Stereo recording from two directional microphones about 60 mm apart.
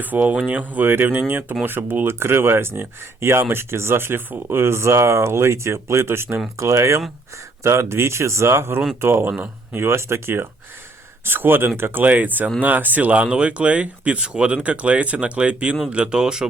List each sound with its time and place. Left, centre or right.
0.0 s speech: right
6.6 s speech: right; by 16.5 s centre